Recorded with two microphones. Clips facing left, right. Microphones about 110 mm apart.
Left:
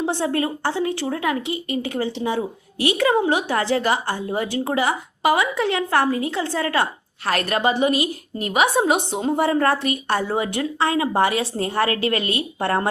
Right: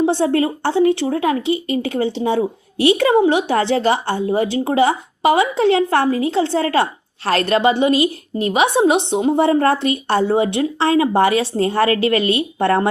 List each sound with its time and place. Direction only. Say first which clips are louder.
0.0 s a woman's voice: right 6 dB; 25° right (ahead or behind)